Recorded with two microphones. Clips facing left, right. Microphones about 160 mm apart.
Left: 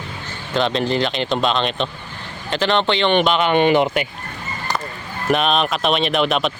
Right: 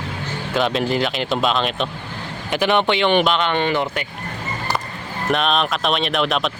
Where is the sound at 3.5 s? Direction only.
15° left (ahead or behind).